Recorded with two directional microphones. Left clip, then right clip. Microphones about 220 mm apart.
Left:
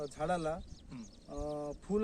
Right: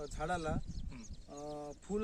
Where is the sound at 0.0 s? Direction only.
10° left (ahead or behind).